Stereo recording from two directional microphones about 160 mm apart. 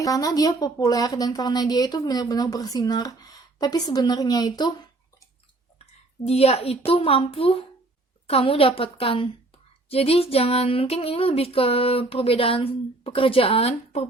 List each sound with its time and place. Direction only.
0.0 s a woman's voice: 20° left (ahead or behind)
5.8 s a woman's voice: 40° left (ahead or behind)
8.3 s a sound: 35° left (ahead or behind)